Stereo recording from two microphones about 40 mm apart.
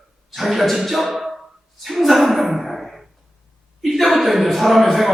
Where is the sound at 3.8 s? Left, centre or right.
Centre.